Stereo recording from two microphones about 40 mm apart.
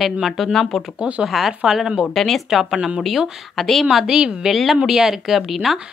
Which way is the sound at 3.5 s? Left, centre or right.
Centre.